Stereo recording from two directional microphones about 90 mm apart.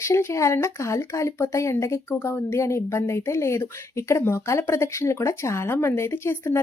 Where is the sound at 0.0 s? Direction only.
30° left (ahead or behind).